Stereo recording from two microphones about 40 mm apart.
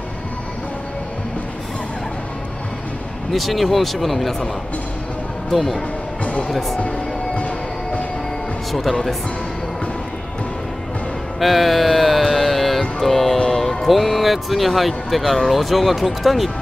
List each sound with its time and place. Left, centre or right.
3.3 s speech: centre
5.5 s speech: centre
7.3 s music: left
11.3 s music: centre
13.8 s speech: centre